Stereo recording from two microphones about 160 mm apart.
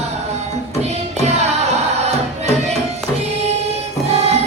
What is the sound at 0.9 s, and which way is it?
Music, 45° right (ahead or behind).